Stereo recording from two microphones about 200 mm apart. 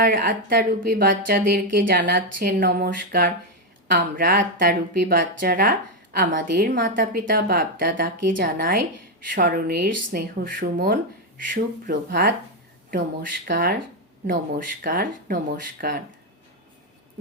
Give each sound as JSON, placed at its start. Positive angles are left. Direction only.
{"t": 0.0, "sound": "speech", "side_deg": -45}